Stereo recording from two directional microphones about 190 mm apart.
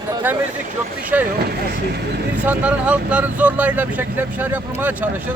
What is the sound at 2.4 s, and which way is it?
A man's voice, 5° right (ahead or behind).